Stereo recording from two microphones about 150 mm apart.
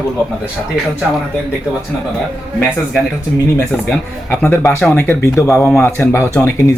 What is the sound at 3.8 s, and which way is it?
Speech, 10° left (ahead or behind).